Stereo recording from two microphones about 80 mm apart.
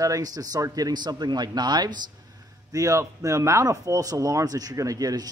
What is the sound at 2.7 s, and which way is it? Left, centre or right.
Speech, right.